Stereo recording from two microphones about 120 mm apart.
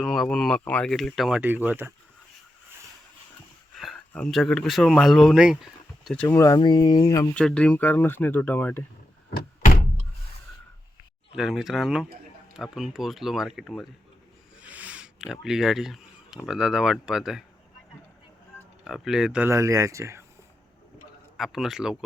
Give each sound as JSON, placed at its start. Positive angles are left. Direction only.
{"t": 0.0, "sound": "speech", "side_deg": 0}
{"t": 1.4, "sound": "speech", "side_deg": -15}
{"t": 3.9, "sound": "a sound", "side_deg": 10}
{"t": 4.3, "sound": "speech", "side_deg": 0}
{"t": 6.2, "sound": "speech", "side_deg": 25}
{"t": 7.3, "sound": "speech", "side_deg": 10}
{"t": 11.3, "sound": "speech", "side_deg": -5}
{"t": 14.6, "sound": "a sound", "side_deg": -10}
{"t": 16.5, "sound": "speech", "side_deg": -5}
{"t": 18.9, "sound": "speech", "side_deg": -5}
{"t": 19.5, "sound": "speech", "side_deg": -25}
{"t": 21.3, "sound": "speech", "side_deg": 0}